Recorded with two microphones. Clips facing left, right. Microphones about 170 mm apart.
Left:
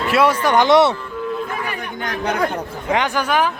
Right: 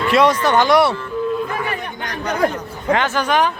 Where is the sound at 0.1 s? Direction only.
10° left (ahead or behind).